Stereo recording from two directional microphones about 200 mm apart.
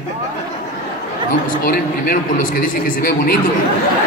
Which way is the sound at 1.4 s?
45° left (ahead or behind).